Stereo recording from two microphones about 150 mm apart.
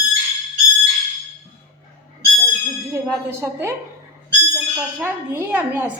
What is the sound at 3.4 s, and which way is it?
Speech, 15° right (ahead or behind).